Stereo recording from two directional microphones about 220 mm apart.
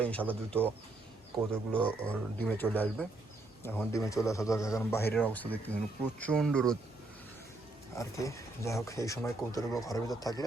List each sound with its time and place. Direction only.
0.0 s speech: 5° left (ahead or behind)
0.5 s speech: 10° right (ahead or behind)
1.7 s speech: 5° left (ahead or behind)
7.9 s speech: 15° left (ahead or behind)